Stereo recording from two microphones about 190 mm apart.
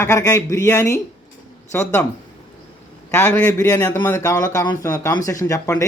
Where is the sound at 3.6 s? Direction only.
20° left (ahead or behind).